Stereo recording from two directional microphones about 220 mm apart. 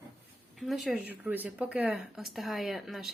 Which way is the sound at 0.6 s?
Centre (ahead or behind).